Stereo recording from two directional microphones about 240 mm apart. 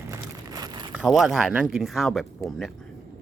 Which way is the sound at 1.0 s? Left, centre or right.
Centre.